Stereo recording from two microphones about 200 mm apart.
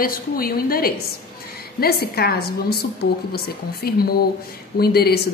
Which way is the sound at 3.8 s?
50° left (ahead or behind).